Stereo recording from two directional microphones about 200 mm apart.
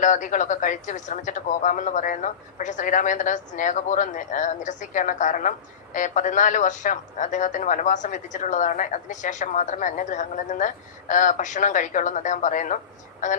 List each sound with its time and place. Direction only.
0.0 s speech: 40° left (ahead or behind)